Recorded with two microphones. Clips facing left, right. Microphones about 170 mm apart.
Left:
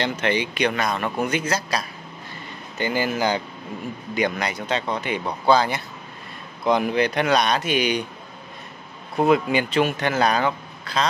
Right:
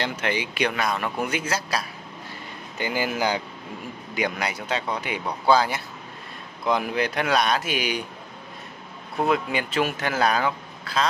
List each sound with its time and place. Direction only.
0.0 s a man's voice: 5° right (ahead or behind)
9.2 s a man's voice: centre (ahead or behind)